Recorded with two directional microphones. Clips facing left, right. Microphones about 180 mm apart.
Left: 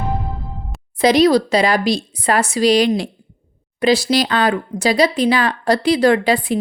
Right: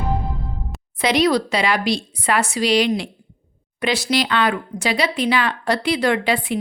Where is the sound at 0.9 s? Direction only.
35° left (ahead or behind).